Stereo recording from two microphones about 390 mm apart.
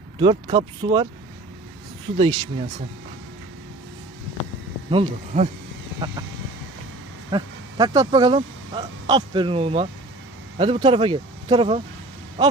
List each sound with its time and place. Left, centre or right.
0.2 s speech: centre
2.1 s speech: centre
4.9 s speech: centre
7.3 s speech: centre